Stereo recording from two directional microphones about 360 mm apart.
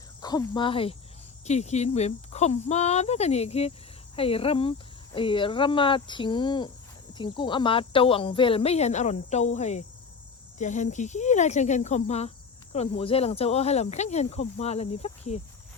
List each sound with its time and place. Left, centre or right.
0.2 s speech: centre